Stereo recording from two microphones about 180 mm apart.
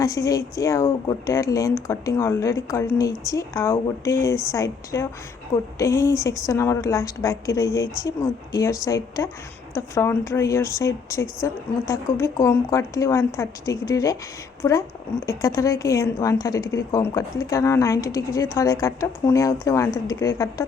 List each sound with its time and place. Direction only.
0.0 s a woman's voice: 20° left (ahead or behind)